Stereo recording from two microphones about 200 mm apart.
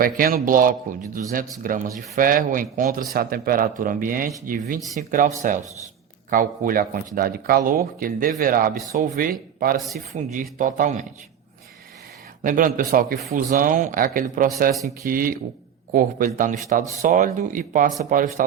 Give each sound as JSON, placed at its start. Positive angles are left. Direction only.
{"t": 0.0, "sound": "speech", "side_deg": -45}
{"t": 6.3, "sound": "speech", "side_deg": -45}
{"t": 10.1, "sound": "speech", "side_deg": -35}
{"t": 12.4, "sound": "speech", "side_deg": -45}